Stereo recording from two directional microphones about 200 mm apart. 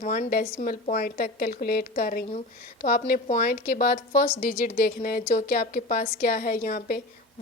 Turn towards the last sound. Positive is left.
turn(degrees=45)  # may be behind; listen again after turning